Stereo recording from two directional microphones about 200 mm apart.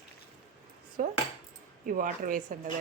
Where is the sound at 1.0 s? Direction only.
40° right (ahead or behind).